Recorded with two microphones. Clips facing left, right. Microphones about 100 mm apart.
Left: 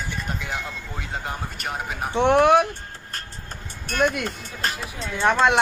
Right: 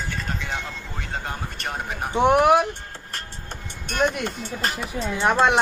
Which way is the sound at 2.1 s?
10° right (ahead or behind).